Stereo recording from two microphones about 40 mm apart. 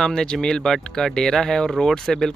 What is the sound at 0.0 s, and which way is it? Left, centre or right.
Speech, centre.